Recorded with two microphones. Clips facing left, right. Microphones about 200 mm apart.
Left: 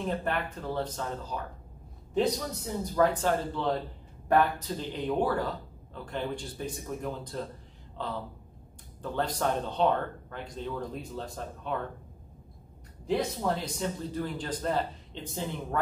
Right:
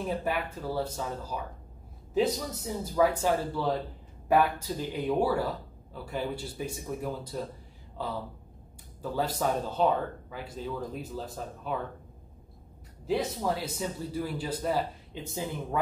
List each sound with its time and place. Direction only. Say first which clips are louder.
0.0 s a man's voice: even; 5° right (ahead or behind)
13.0 s a man's voice: even; centre (ahead or behind)